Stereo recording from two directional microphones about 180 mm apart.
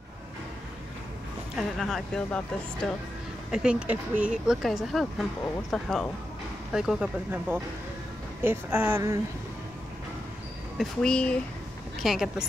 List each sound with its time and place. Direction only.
1.6 s speech: centre (ahead or behind)
3.5 s speech: 5° right (ahead or behind)
10.8 s speech: 5° left (ahead or behind)